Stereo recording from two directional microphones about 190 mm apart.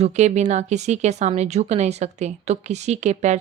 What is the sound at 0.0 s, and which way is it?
Speech, 35° right (ahead or behind).